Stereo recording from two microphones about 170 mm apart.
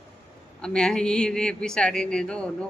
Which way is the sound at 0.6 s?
5° left (ahead or behind).